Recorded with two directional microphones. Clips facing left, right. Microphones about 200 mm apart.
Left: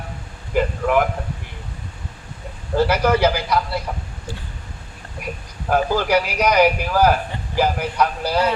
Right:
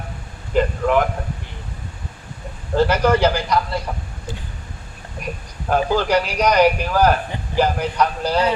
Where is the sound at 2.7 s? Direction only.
10° left (ahead or behind).